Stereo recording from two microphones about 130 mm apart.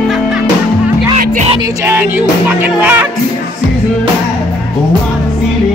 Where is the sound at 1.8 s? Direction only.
15° right (ahead or behind).